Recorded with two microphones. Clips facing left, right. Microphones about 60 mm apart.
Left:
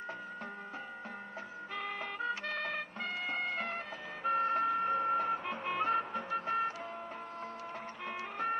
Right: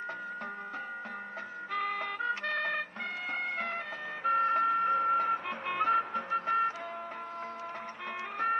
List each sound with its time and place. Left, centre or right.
1.7 s music: right